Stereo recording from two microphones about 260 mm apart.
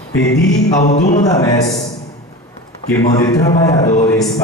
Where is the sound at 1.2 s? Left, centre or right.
Centre.